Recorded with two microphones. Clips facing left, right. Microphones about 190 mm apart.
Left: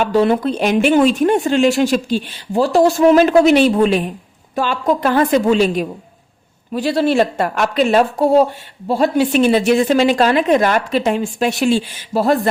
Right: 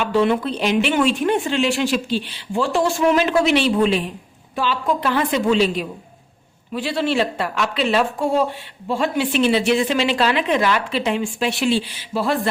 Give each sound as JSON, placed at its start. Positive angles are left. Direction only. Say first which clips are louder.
{"t": 0.0, "sound": "speech", "louder": "left 4 dB", "side_deg": 40}